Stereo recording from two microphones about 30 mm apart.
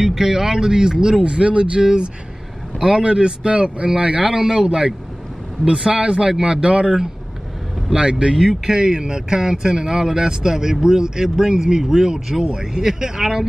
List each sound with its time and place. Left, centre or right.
0.0 s speech: centre
1.2 s speech: right
2.8 s speech: right
4.2 s a man's voice: right
8.6 s a man's voice: right